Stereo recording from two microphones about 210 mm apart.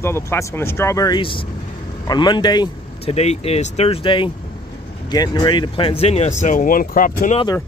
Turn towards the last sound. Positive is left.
turn(degrees=40)  # may be behind; listen again after turning